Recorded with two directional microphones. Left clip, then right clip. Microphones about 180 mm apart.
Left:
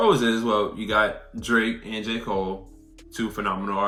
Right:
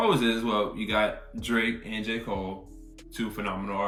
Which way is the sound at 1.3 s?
15° left (ahead or behind).